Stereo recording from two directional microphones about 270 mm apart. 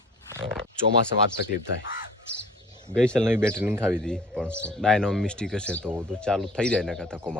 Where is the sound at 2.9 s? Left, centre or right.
Centre.